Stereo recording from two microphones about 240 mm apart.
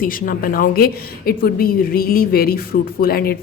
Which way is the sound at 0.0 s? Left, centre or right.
Left.